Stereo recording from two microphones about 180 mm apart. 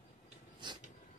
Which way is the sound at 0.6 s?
25° right (ahead or behind).